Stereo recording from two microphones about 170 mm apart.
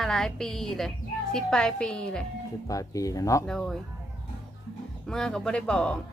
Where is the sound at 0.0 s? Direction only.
5° left (ahead or behind).